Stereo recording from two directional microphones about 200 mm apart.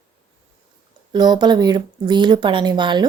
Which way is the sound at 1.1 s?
20° right (ahead or behind).